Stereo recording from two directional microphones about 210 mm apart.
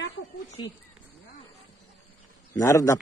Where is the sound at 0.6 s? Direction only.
20° left (ahead or behind).